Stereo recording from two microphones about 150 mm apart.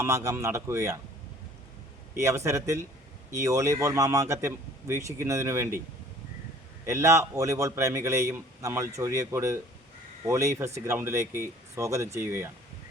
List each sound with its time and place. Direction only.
0.0 s speech: 20° right (ahead or behind)
2.1 s speech: 20° right (ahead or behind)
6.8 s speech: 20° right (ahead or behind)